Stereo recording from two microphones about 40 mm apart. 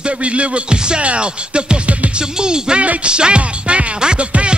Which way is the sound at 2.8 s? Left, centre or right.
Right.